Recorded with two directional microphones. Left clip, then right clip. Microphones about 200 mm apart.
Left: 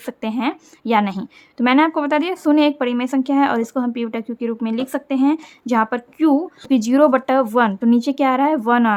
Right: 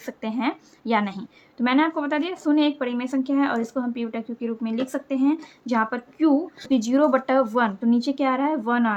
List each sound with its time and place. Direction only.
0.0 s a woman's voice: 25° left (ahead or behind)